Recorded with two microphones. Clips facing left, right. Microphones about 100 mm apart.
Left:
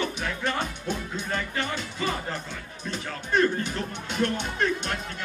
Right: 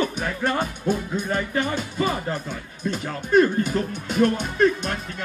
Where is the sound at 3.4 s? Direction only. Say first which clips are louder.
Right 6 dB; 5° right (ahead or behind).